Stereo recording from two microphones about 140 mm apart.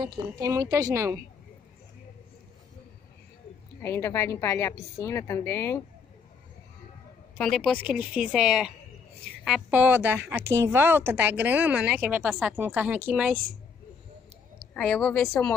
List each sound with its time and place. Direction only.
0.0 s a woman's voice: 35° right (ahead or behind)
3.8 s a woman's voice: 20° left (ahead or behind)
7.3 s speech: 5° left (ahead or behind)
7.8 s speech: 10° right (ahead or behind)
9.7 s speech: 15° right (ahead or behind)
14.7 s a woman's voice: 5° left (ahead or behind)